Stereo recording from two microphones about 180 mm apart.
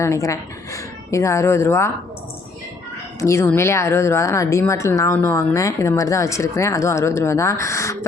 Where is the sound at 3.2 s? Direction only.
15° left (ahead or behind).